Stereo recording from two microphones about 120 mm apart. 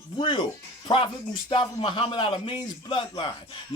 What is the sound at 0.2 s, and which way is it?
A man's voice, 40° left (ahead or behind).